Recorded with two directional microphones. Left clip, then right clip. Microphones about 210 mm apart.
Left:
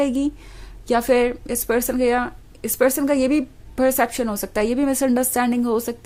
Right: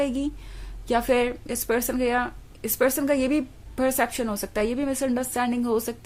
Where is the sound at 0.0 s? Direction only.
20° left (ahead or behind).